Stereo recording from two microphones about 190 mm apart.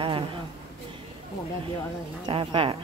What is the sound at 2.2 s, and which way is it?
Speech, 25° right (ahead or behind).